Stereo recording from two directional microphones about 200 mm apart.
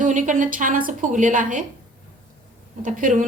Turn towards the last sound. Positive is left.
turn(degrees=-40)  # may be behind; listen again after turning